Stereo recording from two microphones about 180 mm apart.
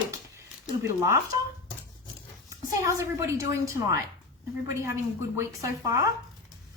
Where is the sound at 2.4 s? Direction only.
15° right (ahead or behind).